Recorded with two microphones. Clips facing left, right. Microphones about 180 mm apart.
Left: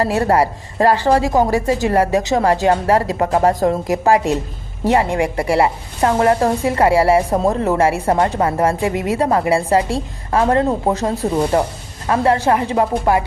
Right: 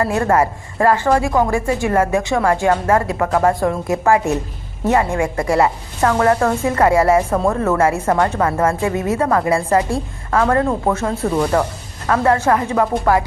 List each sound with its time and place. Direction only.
0.2 s speech: 30° left (ahead or behind)
3.7 s a woman's voice: 20° left (ahead or behind)
10.9 s speech: 35° left (ahead or behind)
11.3 s a woman's voice: 25° left (ahead or behind)